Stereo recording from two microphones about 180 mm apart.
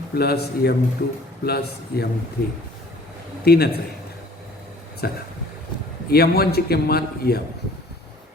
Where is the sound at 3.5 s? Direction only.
60° left (ahead or behind).